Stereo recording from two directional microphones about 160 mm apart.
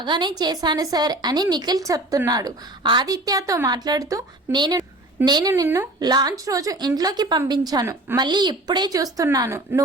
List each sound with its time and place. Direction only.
0.0 s a woman's voice: 30° right (ahead or behind)